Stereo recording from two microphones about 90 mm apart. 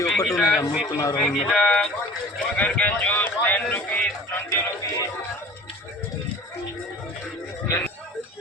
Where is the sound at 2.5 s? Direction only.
15° left (ahead or behind).